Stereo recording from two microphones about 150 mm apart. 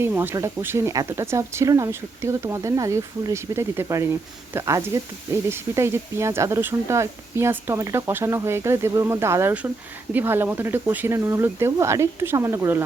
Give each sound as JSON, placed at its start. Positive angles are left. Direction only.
{"t": 0.0, "sound": "speech", "side_deg": -15}